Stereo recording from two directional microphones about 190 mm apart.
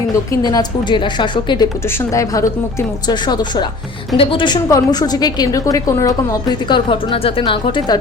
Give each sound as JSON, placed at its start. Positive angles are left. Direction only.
{"t": 0.3, "sound": "a woman's voice", "side_deg": 20}